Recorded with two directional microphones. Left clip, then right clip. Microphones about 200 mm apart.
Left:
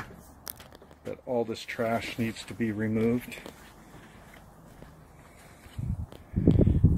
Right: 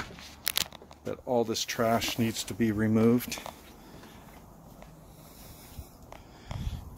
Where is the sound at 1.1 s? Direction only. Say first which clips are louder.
Right 2 dB; 20° right (ahead or behind).